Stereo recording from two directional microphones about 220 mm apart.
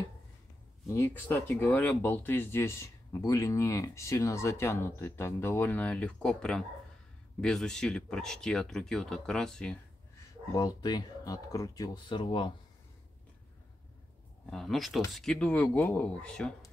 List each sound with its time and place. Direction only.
0.8 s speech: 10° left (ahead or behind)
10.5 s speech: 20° left (ahead or behind)
14.4 s speech: centre (ahead or behind)